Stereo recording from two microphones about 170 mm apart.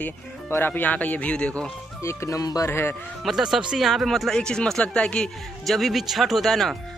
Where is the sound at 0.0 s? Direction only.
10° left (ahead or behind).